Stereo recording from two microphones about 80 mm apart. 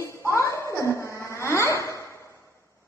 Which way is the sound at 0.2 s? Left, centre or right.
Left.